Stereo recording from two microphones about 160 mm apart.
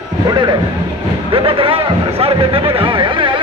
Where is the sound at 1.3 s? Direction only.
35° right (ahead or behind).